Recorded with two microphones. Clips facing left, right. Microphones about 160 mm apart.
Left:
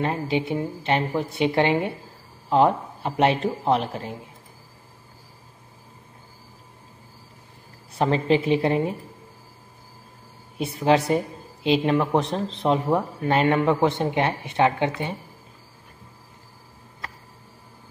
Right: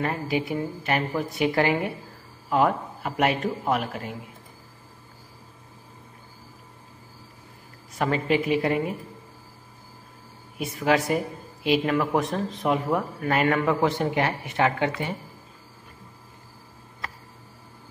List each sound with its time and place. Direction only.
0.0 s speech: 25° left (ahead or behind)
7.9 s speech: 30° left (ahead or behind)
10.6 s speech: 30° left (ahead or behind)